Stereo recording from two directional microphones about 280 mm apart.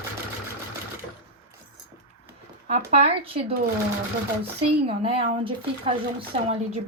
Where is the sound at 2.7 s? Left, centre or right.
Right.